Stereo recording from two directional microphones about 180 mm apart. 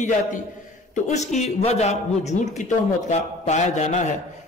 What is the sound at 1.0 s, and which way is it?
A man's voice, 40° left (ahead or behind).